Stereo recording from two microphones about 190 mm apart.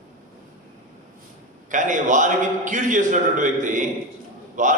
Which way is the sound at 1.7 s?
40° right (ahead or behind).